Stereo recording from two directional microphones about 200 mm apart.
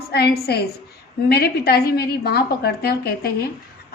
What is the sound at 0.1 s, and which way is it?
A woman's voice, 55° left (ahead or behind).